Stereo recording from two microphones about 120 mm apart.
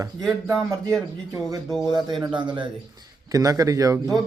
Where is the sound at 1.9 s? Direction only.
35° right (ahead or behind).